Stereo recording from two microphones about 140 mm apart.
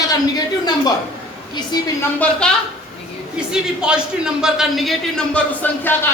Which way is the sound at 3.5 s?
5° right (ahead or behind).